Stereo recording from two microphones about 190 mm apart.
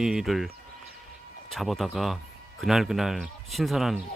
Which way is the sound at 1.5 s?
Centre (ahead or behind).